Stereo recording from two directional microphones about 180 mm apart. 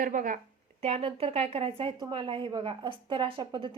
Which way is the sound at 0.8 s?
35° right (ahead or behind).